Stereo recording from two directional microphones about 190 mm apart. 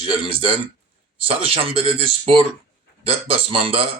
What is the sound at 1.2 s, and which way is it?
Speech, 30° right (ahead or behind).